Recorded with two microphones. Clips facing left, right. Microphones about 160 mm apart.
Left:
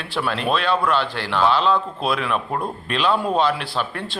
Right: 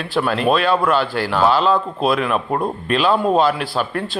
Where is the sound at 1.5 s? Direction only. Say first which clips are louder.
Right 3 dB; 5° right (ahead or behind).